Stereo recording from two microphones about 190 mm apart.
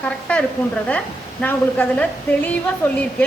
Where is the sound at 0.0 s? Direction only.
5° left (ahead or behind).